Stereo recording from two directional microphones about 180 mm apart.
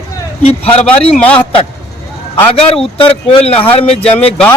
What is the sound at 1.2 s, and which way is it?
A man's voice, 10° left (ahead or behind).